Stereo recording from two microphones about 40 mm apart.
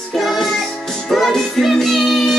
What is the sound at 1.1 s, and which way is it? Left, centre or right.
Music, centre.